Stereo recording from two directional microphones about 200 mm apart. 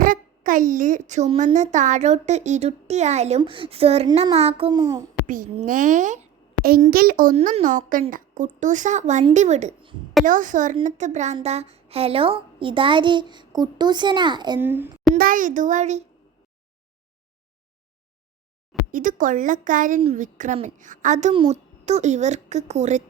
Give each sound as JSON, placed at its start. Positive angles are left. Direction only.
{"t": 0.0, "sound": "a child's voice", "side_deg": -40}
{"t": 4.8, "sound": "a child's voice", "side_deg": -15}
{"t": 5.2, "sound": "a child's voice", "side_deg": -40}
{"t": 7.3, "sound": "a child's voice", "side_deg": -35}
{"t": 14.6, "sound": "a child's voice", "side_deg": -10}
{"t": 15.1, "sound": "speech", "side_deg": -45}
{"t": 18.9, "sound": "speech", "side_deg": -40}